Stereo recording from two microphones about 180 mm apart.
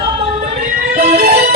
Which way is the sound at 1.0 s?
55° right (ahead or behind).